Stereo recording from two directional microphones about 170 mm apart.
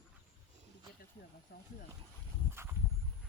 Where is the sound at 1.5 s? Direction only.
65° left (ahead or behind).